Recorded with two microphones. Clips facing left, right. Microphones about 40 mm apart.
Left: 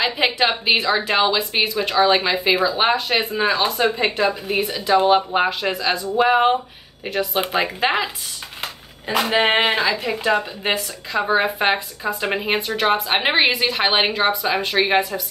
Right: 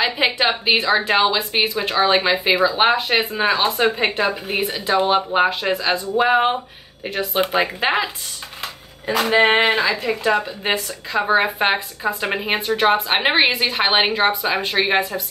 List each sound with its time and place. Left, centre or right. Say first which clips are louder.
0.0 s speech: even; centre
9.0 s speech: right 1 dB; left
9.3 s speech: right 3 dB; centre